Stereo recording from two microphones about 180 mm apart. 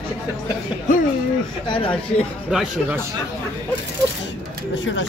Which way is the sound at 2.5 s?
Centre (ahead or behind).